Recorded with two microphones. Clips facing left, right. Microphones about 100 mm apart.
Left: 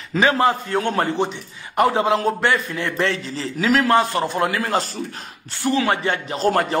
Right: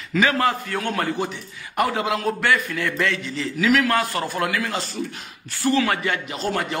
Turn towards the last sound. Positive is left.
turn(degrees=40)  # may be behind; listen again after turning